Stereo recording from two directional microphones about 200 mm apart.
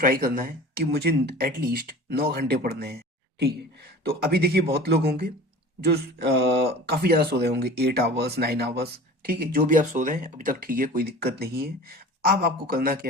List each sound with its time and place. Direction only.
0.0 s speech: 45° right (ahead or behind)